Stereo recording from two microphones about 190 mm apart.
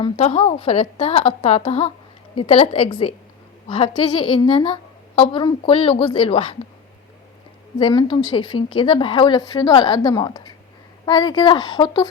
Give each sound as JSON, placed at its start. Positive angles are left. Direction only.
{"t": 0.0, "sound": "a woman's voice", "side_deg": 35}
{"t": 7.8, "sound": "a woman's voice", "side_deg": 25}